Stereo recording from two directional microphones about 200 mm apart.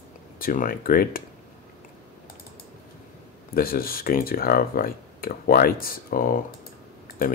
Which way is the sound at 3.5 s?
45° left (ahead or behind).